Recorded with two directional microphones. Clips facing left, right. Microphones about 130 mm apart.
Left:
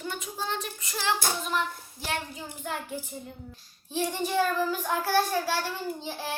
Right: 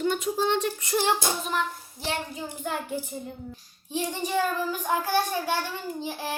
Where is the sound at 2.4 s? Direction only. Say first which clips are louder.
Right 4 dB; 15° right (ahead or behind).